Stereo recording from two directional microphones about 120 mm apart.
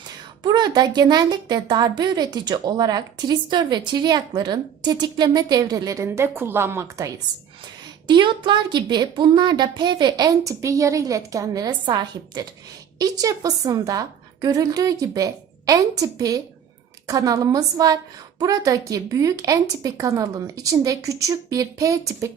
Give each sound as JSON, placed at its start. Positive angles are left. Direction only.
{"t": 0.4, "sound": "a woman's voice", "side_deg": -35}
{"t": 8.0, "sound": "a woman's voice", "side_deg": -40}